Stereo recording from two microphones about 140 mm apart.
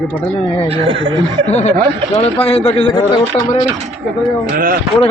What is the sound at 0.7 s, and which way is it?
Speech, 40° right (ahead or behind).